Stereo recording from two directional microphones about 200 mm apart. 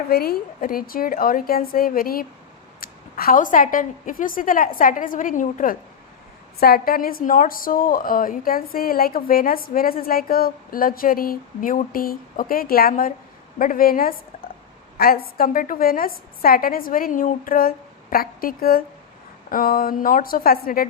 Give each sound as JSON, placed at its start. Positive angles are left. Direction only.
{"t": 0.1, "sound": "a woman's voice", "side_deg": 50}